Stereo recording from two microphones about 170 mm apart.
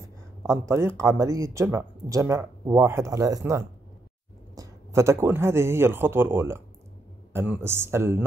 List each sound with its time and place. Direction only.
0.4 s speech: 15° right (ahead or behind)